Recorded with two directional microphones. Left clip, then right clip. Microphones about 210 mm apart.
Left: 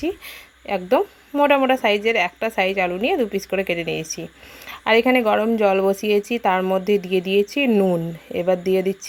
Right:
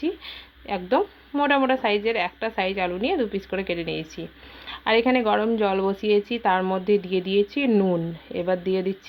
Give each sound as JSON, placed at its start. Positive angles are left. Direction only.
{"t": 0.7, "sound": "a woman's voice", "side_deg": 50}